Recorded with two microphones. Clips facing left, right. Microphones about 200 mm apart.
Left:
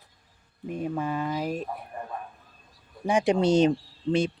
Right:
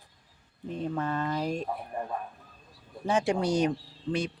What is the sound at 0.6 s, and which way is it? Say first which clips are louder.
Speech: left 2 dB; 10° left (ahead or behind).